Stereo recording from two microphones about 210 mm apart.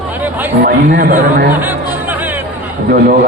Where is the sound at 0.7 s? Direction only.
45° right (ahead or behind).